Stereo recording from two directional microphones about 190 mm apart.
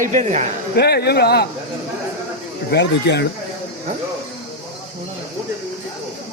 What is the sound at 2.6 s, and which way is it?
Speech, 65° left (ahead or behind).